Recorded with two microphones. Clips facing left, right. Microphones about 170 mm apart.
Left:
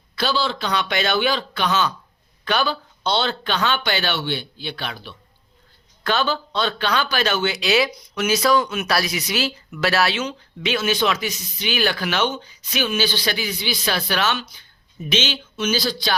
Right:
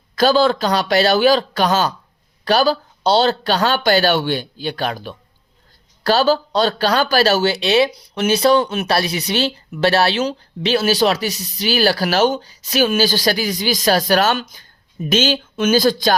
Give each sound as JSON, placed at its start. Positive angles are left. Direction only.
{"t": 0.2, "sound": "speech", "side_deg": -45}